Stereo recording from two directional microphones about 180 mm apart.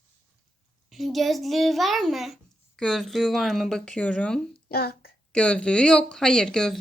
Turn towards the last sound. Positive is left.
turn(degrees=5)  # may be behind; listen again after turning